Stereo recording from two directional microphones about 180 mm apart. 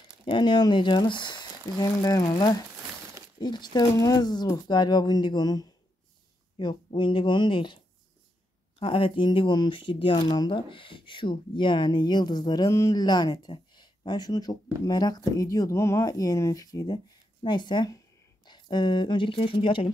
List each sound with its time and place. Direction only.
0.3 s speech: 25° left (ahead or behind)